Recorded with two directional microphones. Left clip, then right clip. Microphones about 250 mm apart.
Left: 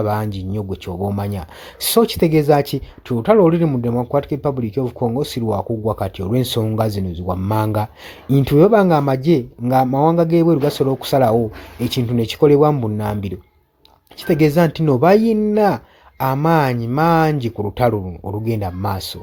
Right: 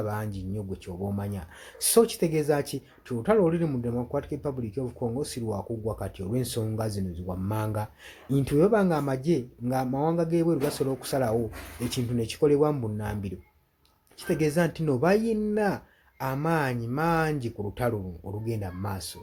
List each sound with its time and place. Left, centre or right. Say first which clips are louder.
0.0 s speech: left 12 dB; left